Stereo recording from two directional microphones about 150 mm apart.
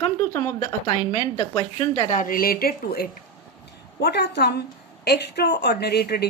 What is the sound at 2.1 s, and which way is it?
A woman's voice, 60° left (ahead or behind).